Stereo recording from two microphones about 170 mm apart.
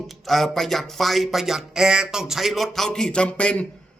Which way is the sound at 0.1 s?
Centre (ahead or behind).